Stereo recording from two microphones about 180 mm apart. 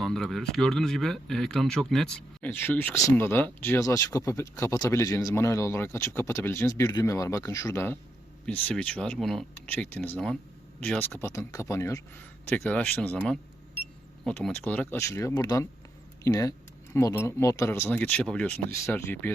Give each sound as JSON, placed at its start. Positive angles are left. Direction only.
{"t": 0.0, "sound": "speech", "side_deg": 0}